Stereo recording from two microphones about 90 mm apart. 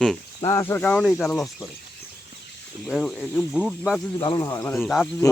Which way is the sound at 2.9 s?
Centre (ahead or behind).